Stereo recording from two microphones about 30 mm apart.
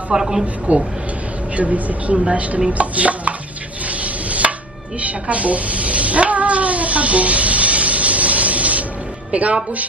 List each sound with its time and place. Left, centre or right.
0.1 s speech: centre
0.7 s a woman's voice: right
2.8 s music: right
3.8 s stir: right
5.0 s a woman's voice: right